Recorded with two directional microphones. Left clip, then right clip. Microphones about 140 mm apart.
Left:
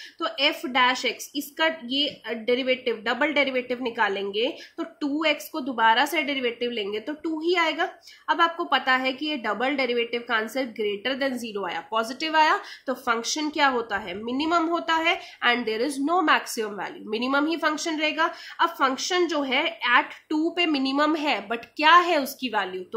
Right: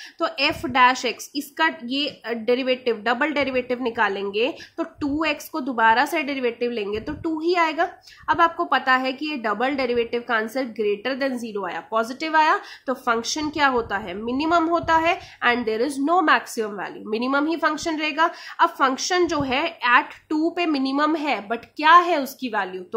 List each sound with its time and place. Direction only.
0.2 s a woman's voice: 35° right (ahead or behind)